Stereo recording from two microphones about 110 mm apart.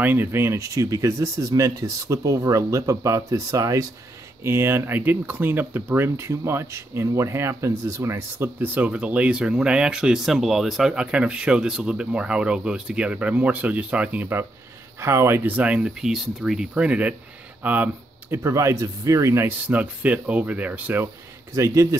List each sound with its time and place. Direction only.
0.0 s speech: 20° right (ahead or behind)
21.5 s speech: 25° right (ahead or behind)